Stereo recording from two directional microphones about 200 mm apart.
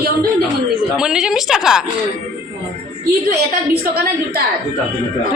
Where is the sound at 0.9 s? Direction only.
5° right (ahead or behind).